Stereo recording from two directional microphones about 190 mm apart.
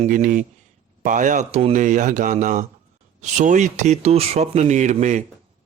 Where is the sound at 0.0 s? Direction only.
45° right (ahead or behind).